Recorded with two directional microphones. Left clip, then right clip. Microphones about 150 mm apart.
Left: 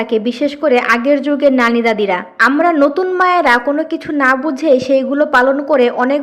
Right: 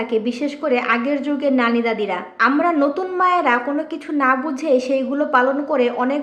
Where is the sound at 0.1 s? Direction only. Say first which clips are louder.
Left 6 dB; 30° left (ahead or behind).